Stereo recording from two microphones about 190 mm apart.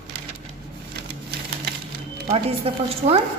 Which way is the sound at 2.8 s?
30° right (ahead or behind).